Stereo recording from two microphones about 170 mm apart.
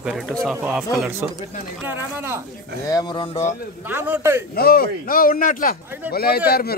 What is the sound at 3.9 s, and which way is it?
Speech, 15° right (ahead or behind).